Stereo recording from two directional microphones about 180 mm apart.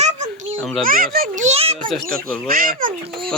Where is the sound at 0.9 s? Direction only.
50° right (ahead or behind); by 1.8 s 35° right (ahead or behind).